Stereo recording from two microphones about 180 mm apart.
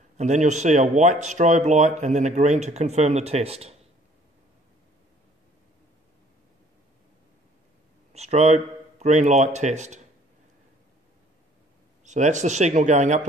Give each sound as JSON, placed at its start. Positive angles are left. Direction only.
{"t": 0.2, "sound": "speech", "side_deg": -40}
{"t": 8.1, "sound": "speech", "side_deg": -35}
{"t": 12.0, "sound": "speech", "side_deg": -40}